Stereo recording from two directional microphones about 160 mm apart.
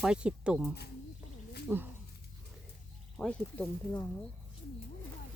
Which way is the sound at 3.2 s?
10° left (ahead or behind).